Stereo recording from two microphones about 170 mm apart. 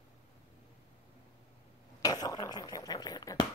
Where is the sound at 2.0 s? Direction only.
20° left (ahead or behind).